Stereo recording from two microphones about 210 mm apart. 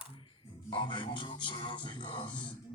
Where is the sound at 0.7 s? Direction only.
20° left (ahead or behind).